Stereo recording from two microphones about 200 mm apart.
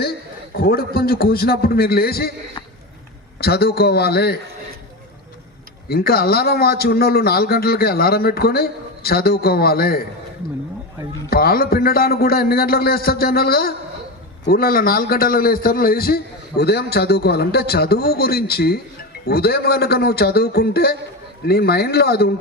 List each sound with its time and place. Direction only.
0.6 s a man's voice: 50° left (ahead or behind)
3.4 s a man's voice: 50° left (ahead or behind)
5.9 s a man's voice: 50° left (ahead or behind)
11.3 s a man's voice: 50° left (ahead or behind)